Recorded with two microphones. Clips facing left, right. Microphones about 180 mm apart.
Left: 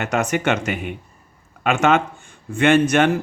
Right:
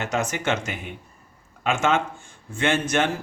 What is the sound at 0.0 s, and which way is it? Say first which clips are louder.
Speech: left 5 dB; 60° left (ahead or behind).